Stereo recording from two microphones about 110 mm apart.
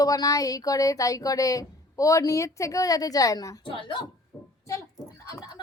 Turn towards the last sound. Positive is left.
turn(degrees=30)  # may be behind; listen again after turning